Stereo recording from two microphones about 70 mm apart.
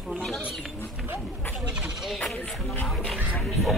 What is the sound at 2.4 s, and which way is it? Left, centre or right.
Music, left.